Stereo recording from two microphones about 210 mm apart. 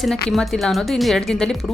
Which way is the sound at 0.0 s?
Centre (ahead or behind).